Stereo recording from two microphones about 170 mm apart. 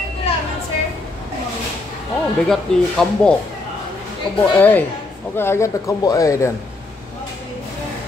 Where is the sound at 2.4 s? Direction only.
5° left (ahead or behind).